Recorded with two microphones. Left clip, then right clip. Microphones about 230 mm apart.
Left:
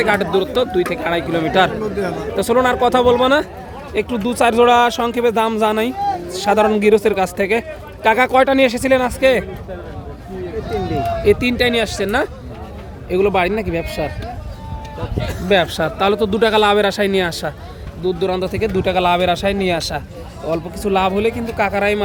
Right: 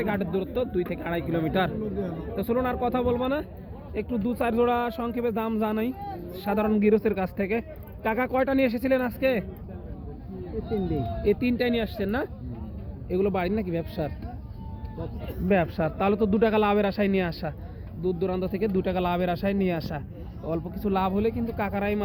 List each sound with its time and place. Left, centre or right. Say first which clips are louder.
0.0 s speech: left 13 dB; centre
10.8 s speech: left 12 dB; left
15.4 s speech: left 9 dB; centre